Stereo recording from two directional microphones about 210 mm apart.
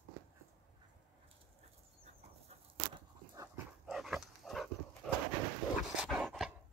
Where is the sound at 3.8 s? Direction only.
Centre (ahead or behind).